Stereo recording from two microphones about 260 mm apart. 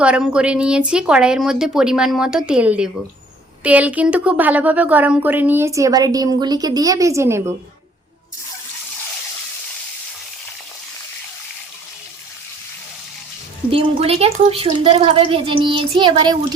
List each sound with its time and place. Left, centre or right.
0.0 s a woman's voice: centre
13.7 s speech: right